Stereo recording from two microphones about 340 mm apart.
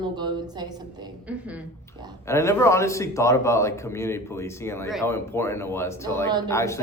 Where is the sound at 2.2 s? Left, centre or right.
Centre.